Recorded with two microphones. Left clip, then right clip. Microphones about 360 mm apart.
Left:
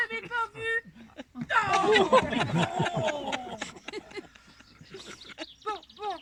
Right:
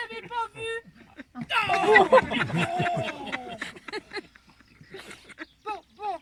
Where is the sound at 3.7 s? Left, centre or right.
Right.